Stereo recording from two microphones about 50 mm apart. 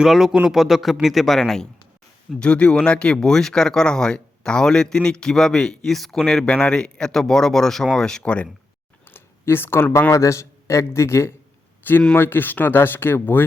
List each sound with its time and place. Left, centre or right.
0.0 s speech: centre
2.4 s speech: left; by 6.2 s centre
6.2 s speech: centre
8.2 s speech: left
9.0 s a sound: left
10.1 s a man's voice: left
11.8 s a man's voice: left